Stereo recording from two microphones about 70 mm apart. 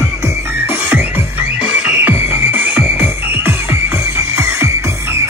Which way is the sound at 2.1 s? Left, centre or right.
Right.